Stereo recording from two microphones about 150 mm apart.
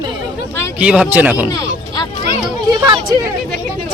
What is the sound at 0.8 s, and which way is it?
Speech, 5° right (ahead or behind).